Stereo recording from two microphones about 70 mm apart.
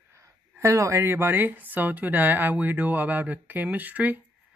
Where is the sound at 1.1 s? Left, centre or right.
Right.